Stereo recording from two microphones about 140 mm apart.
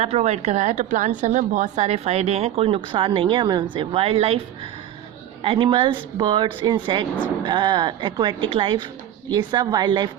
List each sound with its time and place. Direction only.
0.0 s a woman's voice: 50° right (ahead or behind)
5.4 s speech: 40° right (ahead or behind)